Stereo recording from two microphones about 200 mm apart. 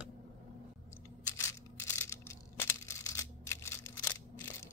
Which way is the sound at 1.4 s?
15° left (ahead or behind).